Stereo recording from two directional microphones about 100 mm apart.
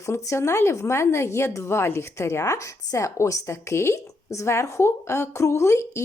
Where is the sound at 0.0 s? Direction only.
30° left (ahead or behind).